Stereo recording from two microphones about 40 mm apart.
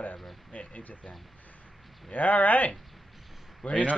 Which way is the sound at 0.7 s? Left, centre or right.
Left.